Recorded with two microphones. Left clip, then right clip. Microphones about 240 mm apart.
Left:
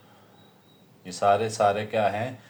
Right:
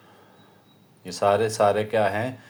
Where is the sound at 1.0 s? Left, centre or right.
Right.